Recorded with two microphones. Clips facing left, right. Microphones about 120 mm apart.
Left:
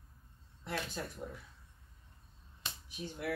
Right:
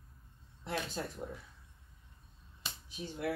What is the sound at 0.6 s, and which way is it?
Speech, 25° right (ahead or behind).